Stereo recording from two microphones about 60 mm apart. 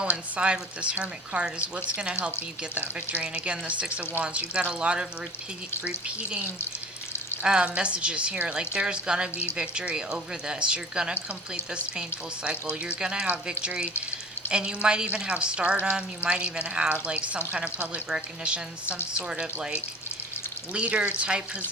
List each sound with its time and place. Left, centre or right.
0.0 s a woman's voice: centre
7.4 s a woman's voice: centre
20.7 s speech: right